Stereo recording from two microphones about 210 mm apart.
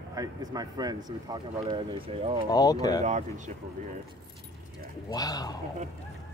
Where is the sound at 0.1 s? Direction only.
15° right (ahead or behind).